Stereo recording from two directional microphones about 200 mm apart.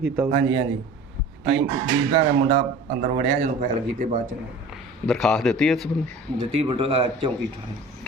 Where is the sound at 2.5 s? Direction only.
40° right (ahead or behind).